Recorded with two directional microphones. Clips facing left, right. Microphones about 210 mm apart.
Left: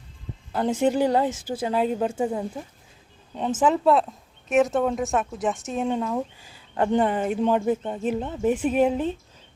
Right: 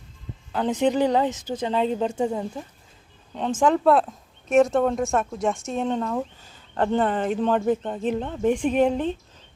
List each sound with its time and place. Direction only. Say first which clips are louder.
0.5 s speech: even; 10° left (ahead or behind)
3.6 s speech: right 1 dB; centre (ahead or behind)